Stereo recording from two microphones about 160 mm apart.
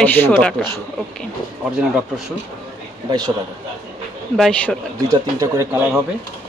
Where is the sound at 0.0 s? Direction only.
10° left (ahead or behind).